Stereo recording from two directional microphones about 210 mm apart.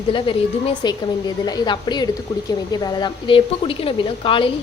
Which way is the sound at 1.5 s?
20° left (ahead or behind).